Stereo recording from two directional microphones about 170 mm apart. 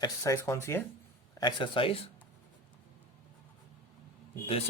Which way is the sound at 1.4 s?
25° left (ahead or behind).